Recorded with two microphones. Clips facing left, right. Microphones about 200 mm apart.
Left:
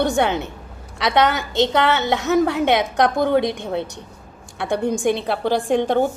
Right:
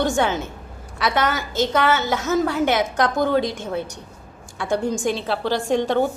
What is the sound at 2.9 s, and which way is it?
Speech, 65° left (ahead or behind).